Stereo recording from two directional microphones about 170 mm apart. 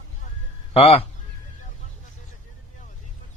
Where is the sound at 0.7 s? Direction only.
35° left (ahead or behind).